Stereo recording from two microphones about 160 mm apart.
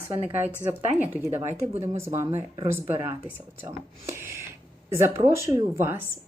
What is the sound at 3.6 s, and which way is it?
Speech, 15° right (ahead or behind).